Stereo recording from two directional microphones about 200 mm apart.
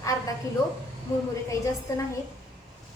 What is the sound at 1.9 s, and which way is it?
Speech, 15° left (ahead or behind).